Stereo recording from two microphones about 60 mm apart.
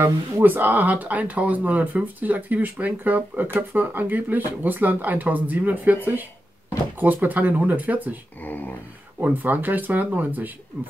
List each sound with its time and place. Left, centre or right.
0.0 s speech: right
7.0 s speech: right
8.5 s speech: left
9.2 s speech: right